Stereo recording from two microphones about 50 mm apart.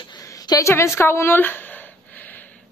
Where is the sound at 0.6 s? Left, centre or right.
Left.